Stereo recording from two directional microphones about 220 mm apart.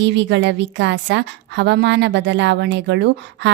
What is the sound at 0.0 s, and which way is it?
A woman's voice, 55° right (ahead or behind).